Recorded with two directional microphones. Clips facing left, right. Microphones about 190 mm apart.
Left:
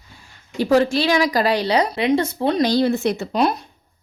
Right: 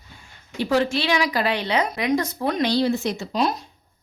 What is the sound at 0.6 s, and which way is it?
A woman's voice, 40° left (ahead or behind).